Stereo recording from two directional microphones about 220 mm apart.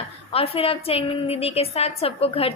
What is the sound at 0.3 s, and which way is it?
A woman's voice, 25° left (ahead or behind).